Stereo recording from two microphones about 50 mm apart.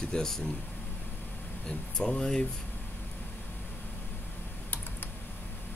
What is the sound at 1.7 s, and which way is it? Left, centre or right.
Speech, centre.